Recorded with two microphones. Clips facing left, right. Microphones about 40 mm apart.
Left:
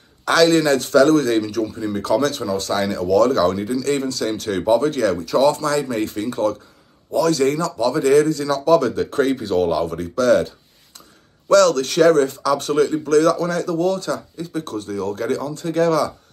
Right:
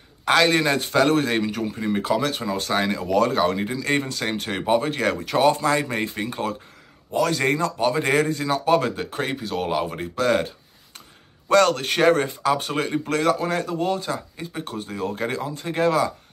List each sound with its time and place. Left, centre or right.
0.2 s speech: right
2.0 s speech: centre
2.4 s speech: right
5.0 s speech: right
8.9 s speech: centre
9.7 s speech: right